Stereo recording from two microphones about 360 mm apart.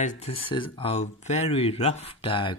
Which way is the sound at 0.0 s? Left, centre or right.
Centre.